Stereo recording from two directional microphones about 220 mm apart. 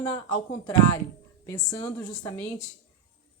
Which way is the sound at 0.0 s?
15° left (ahead or behind).